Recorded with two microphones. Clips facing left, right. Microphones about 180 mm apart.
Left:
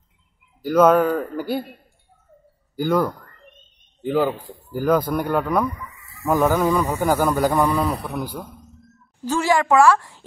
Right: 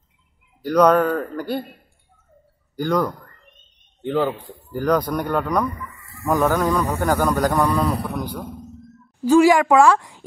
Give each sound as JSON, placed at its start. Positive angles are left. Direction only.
{"t": 0.6, "sound": "a man's voice", "side_deg": 0}
{"t": 2.7, "sound": "a man's voice", "side_deg": 5}
{"t": 5.9, "sound": "a sound", "side_deg": -55}
{"t": 6.2, "sound": "a man's voice", "side_deg": 5}
{"t": 9.2, "sound": "a woman's voice", "side_deg": -10}